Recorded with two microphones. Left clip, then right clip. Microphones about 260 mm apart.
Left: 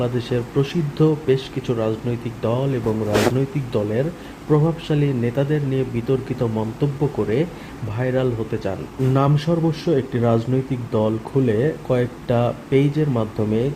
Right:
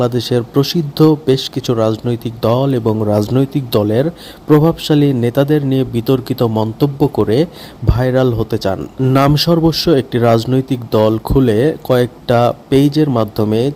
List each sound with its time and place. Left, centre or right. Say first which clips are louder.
0.0 s a man's voice: right 8 dB; right